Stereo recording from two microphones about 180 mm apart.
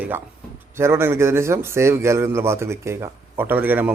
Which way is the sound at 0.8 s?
15° right (ahead or behind).